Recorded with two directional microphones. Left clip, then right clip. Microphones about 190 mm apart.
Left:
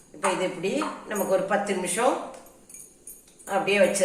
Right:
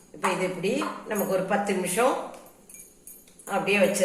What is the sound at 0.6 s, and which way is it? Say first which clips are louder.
Speech: even; 15° right (ahead or behind).